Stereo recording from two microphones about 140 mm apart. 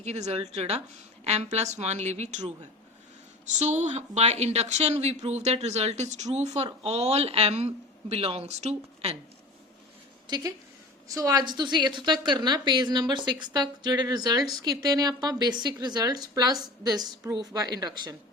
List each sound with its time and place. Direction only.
0.0 s a woman's voice: 55° right (ahead or behind)
3.6 s speech: 55° right (ahead or behind)
10.2 s a woman's voice: 30° right (ahead or behind)